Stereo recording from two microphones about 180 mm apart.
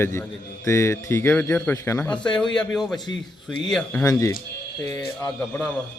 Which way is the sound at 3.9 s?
15° left (ahead or behind).